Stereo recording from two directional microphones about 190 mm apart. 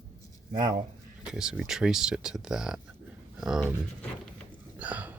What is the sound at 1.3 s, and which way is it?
Speech, centre (ahead or behind).